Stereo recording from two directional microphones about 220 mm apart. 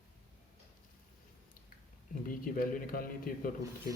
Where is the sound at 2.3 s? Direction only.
40° left (ahead or behind).